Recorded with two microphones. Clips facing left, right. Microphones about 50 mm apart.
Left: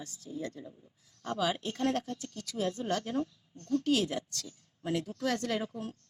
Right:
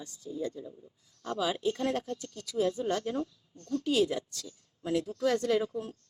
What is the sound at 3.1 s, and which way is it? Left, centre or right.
Speech, left.